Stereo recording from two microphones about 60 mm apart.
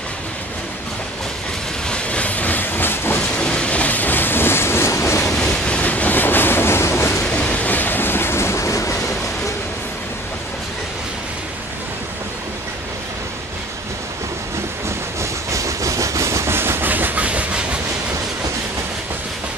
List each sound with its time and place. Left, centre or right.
1.9 s train: centre; by 3.2 s left
3.3 s train: centre; by 5.3 s left
5.3 s vehicle: centre
5.8 s train: left
7.2 s train: left
15.5 s train: right; by 17.7 s centre